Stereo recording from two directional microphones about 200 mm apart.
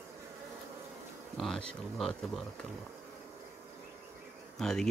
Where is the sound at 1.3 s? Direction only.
Centre (ahead or behind).